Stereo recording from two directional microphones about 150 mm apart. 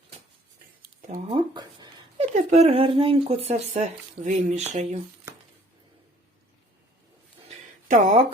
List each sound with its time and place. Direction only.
1.3 s a sound: 30° right (ahead or behind)
2.3 s speech: 50° right (ahead or behind)
7.9 s speech: 55° right (ahead or behind)